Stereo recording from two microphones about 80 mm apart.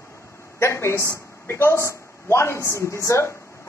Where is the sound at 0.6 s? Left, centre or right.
Left.